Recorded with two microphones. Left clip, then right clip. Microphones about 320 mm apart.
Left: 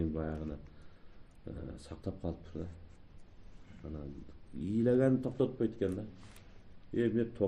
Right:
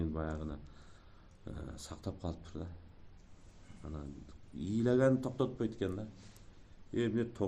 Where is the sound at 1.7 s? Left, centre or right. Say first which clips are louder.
Even; right.